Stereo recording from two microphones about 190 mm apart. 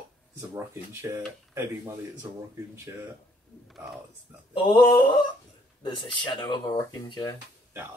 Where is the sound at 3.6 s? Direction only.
Centre (ahead or behind).